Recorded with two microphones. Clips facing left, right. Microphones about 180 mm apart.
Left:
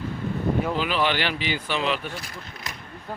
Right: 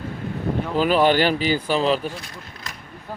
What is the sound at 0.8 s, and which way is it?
Speech, 45° right (ahead or behind).